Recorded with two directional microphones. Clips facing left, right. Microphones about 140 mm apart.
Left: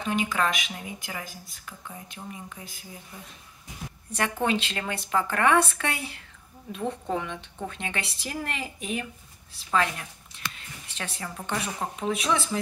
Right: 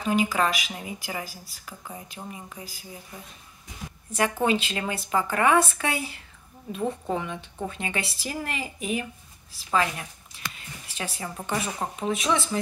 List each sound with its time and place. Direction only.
0.0 s a woman's voice: 5° right (ahead or behind)
4.2 s a woman's voice: 5° right (ahead or behind)